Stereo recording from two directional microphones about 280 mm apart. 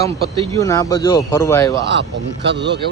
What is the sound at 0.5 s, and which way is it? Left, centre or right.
Speech, centre.